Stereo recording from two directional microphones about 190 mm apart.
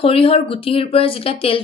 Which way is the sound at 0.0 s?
30° left (ahead or behind).